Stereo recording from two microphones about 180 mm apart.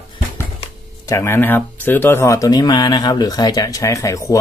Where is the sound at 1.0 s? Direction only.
15° left (ahead or behind).